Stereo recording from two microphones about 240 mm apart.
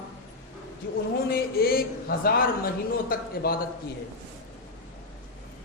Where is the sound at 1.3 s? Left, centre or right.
Left.